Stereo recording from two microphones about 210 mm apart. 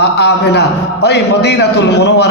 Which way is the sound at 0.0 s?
50° left (ahead or behind).